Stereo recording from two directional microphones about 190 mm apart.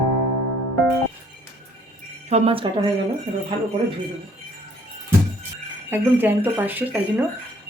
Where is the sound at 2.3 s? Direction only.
30° right (ahead or behind).